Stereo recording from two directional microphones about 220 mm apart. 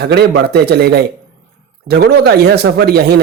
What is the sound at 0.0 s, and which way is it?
A man's voice, 45° right (ahead or behind).